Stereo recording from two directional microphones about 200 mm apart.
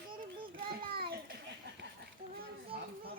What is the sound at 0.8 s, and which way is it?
Children playing, 50° right (ahead or behind).